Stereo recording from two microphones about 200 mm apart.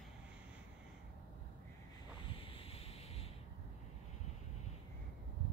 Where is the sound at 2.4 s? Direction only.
25° left (ahead or behind).